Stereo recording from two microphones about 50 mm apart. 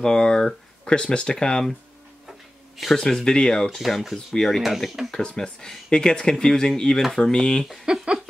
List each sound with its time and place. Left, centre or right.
0.0 s speech: centre
2.8 s speech: centre
5.2 s speech: centre
7.8 s speech: centre